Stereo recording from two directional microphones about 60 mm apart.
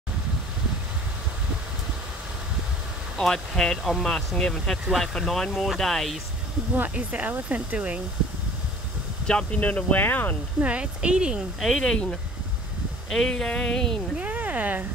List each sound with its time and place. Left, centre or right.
3.2 s speech: centre
6.8 s speech: right
9.3 s speech: centre
9.6 s speech: left
10.6 s speech: right
11.6 s speech: centre
14.1 s speech: right